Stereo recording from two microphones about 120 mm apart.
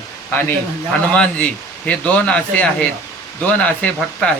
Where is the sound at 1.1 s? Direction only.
10° left (ahead or behind).